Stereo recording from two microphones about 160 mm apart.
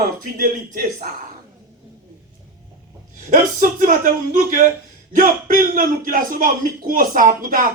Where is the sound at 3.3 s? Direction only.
55° right (ahead or behind).